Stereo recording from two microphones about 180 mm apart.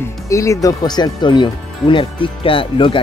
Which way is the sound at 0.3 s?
15° left (ahead or behind).